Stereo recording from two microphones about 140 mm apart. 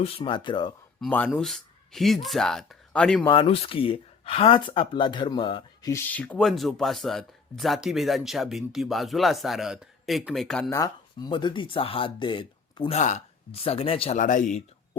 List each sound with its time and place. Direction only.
0.0 s speech: 40° left (ahead or behind)
1.3 s speech: centre (ahead or behind)
3.2 s speech: 40° left (ahead or behind)
5.9 s speech: 15° left (ahead or behind)
10.7 s speech: 25° left (ahead or behind)
12.9 s speech: 55° left (ahead or behind)
14.2 s speech: 65° left (ahead or behind)